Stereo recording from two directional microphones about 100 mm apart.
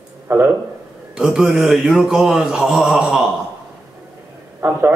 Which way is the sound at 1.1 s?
5° right (ahead or behind).